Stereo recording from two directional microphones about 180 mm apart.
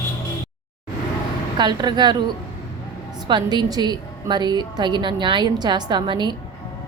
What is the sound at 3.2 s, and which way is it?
A woman's voice, 25° right (ahead or behind).